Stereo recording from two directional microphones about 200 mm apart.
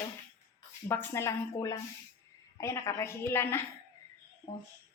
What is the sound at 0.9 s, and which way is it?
A woman's voice, 10° left (ahead or behind).